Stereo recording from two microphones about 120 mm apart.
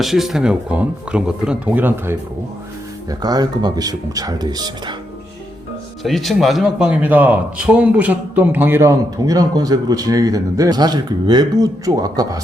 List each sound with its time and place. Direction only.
0.0 s speech: centre (ahead or behind)
3.1 s speech: 35° right (ahead or behind)
6.0 s a man's voice: centre (ahead or behind); by 12.4 s 30° right (ahead or behind)